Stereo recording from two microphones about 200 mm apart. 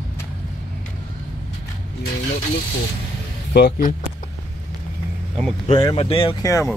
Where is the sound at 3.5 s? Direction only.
50° left (ahead or behind).